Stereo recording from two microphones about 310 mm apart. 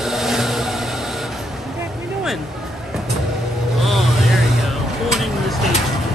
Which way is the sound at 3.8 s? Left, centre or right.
Centre.